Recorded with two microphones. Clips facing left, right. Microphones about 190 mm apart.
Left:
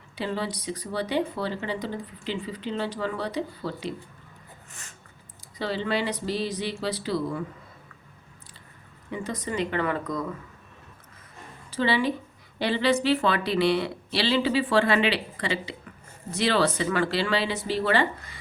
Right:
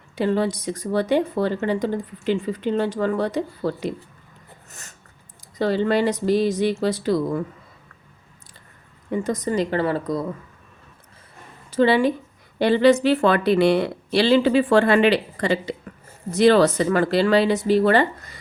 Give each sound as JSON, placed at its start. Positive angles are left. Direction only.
{"t": 0.2, "sound": "speech", "side_deg": -45}
{"t": 4.7, "sound": "a sound", "side_deg": -40}
{"t": 5.5, "sound": "speech", "side_deg": -45}
{"t": 9.0, "sound": "speech", "side_deg": -45}
{"t": 11.8, "sound": "speech", "side_deg": -45}